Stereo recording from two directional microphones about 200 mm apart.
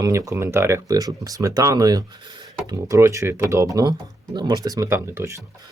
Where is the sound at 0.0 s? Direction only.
15° right (ahead or behind).